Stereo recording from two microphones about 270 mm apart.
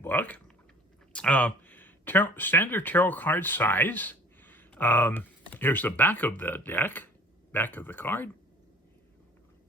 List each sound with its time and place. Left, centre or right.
0.0 s typing: centre
1.1 s speech: centre